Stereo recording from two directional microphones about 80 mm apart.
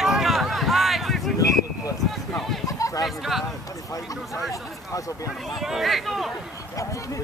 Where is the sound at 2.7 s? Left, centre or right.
Left.